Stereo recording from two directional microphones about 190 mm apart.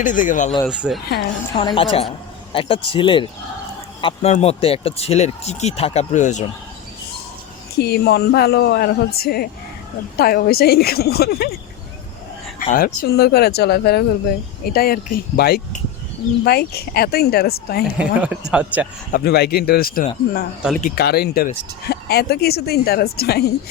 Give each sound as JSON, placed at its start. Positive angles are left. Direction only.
{"t": 0.0, "sound": "speech", "side_deg": 40}
{"t": 0.7, "sound": "speech", "side_deg": -5}
{"t": 1.5, "sound": "speech", "side_deg": 25}
{"t": 7.8, "sound": "speech", "side_deg": 55}
{"t": 12.5, "sound": "speech", "side_deg": 45}
{"t": 17.8, "sound": "speech", "side_deg": -5}
{"t": 19.1, "sound": "speech", "side_deg": 55}